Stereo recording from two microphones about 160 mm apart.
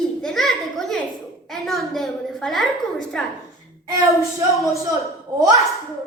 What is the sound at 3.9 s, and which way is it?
A woman's voice, 20° right (ahead or behind).